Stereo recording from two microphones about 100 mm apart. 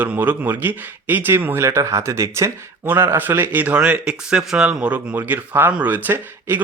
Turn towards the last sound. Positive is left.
turn(degrees=-20)  # may be behind; listen again after turning